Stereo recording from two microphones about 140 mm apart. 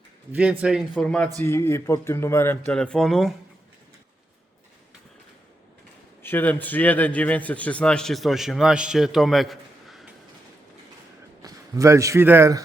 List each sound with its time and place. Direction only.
0.6 s a man's voice: 5° right (ahead or behind)
0.9 s speech: 10° left (ahead or behind)
2.7 s a man's voice: 5° left (ahead or behind)
6.2 s a man's voice: 15° left (ahead or behind)
11.4 s a man's voice: 20° right (ahead or behind)